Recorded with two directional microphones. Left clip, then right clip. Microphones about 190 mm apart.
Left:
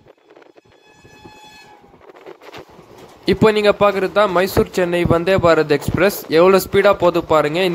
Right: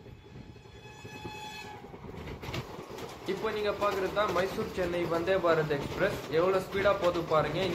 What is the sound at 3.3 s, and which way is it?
A man's voice, 65° left (ahead or behind).